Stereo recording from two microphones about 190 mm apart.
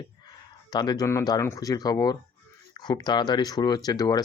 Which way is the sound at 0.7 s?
20° left (ahead or behind).